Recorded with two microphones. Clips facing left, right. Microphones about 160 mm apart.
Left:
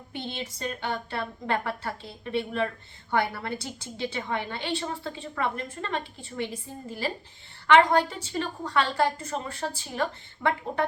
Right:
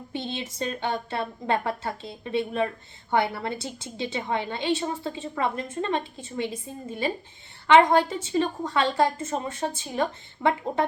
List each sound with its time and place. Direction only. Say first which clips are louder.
0.1 s a woman's voice: right 3 dB; 20° right (ahead or behind)